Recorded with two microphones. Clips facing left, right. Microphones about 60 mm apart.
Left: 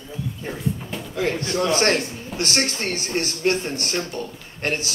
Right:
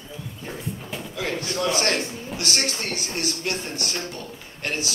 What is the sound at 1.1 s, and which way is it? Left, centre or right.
A man's voice, left.